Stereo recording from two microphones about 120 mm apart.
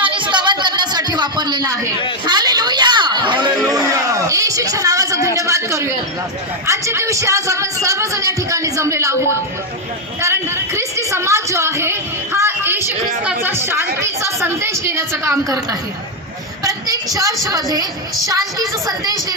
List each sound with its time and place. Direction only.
0.0 s a sound: 45° right (ahead or behind); by 5.9 s 25° right (ahead or behind)
6.7 s a woman's voice: 25° right (ahead or behind)
16.6 s a woman's voice: 30° right (ahead or behind)